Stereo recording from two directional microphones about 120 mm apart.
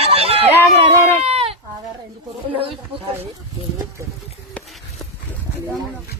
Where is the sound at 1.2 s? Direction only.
55° right (ahead or behind).